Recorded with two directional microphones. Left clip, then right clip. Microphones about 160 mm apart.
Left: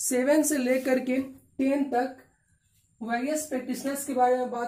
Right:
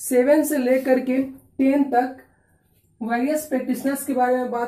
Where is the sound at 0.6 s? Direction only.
35° left (ahead or behind).